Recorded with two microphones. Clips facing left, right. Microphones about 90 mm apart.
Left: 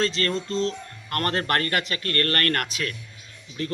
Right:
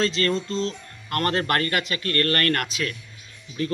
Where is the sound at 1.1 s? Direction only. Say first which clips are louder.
Right 1 dB; 35° left (ahead or behind).